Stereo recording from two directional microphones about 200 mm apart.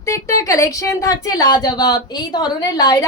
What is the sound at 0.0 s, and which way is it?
Speech, 15° left (ahead or behind).